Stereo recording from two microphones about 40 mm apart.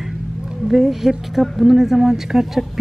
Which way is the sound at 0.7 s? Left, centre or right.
Centre.